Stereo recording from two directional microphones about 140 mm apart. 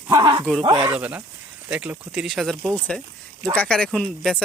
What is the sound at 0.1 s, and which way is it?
Speech, 30° right (ahead or behind).